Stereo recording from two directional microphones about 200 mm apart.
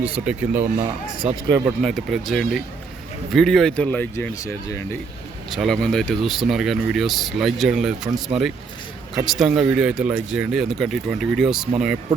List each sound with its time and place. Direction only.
0.0 s speech: 5° right (ahead or behind)
0.8 s speech: 30° right (ahead or behind)
1.5 s speech: 15° right (ahead or behind)
1.8 s speech: centre (ahead or behind)
5.5 s speech: centre (ahead or behind)